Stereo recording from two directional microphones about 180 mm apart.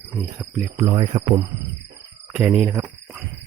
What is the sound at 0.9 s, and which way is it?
Speech, 30° right (ahead or behind).